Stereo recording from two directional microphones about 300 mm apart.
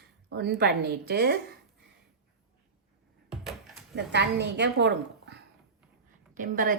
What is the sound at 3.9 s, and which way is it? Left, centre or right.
A woman's voice, right.